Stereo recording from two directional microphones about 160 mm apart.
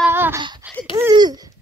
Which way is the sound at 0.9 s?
25° right (ahead or behind).